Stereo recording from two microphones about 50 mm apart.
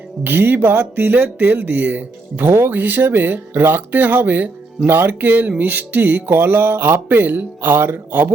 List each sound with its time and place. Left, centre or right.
0.3 s speech: right